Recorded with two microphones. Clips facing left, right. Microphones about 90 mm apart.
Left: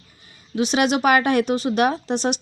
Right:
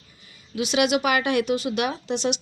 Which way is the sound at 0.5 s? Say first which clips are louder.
Left 2 dB; 35° left (ahead or behind).